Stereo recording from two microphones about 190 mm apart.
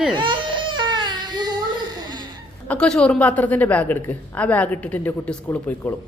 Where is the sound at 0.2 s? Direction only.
25° right (ahead or behind).